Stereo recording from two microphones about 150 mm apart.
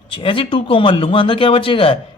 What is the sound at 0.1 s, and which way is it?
Speech, 35° left (ahead or behind).